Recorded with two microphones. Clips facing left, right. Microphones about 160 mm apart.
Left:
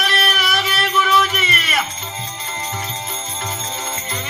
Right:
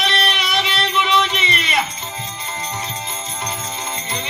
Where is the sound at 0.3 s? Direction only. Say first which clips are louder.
Even; 25° right (ahead or behind).